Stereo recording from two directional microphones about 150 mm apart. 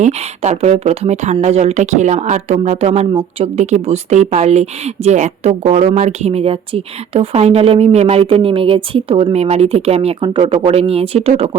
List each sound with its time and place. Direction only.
0.0 s speech: 50° right (ahead or behind)